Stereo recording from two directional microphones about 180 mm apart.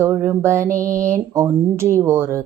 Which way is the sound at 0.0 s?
15° right (ahead or behind).